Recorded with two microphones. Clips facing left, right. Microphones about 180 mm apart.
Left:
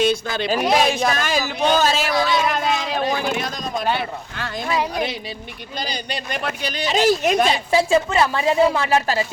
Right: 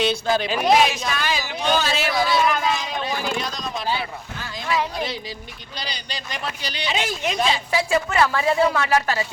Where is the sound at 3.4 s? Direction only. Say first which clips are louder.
Left 4 dB; 50° left (ahead or behind).